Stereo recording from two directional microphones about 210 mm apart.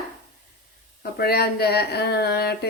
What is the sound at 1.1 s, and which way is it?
A woman's voice, 50° left (ahead or behind).